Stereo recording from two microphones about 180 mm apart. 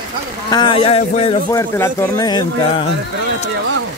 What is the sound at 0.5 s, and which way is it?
Speech, 25° left (ahead or behind).